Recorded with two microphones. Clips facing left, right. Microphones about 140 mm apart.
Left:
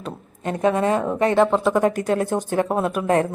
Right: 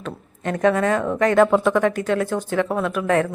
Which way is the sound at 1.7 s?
40° left (ahead or behind).